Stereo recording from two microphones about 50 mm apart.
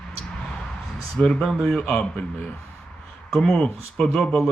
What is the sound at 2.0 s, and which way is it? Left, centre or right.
Speech, left.